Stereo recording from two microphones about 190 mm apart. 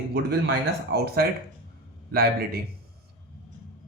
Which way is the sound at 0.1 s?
60° right (ahead or behind).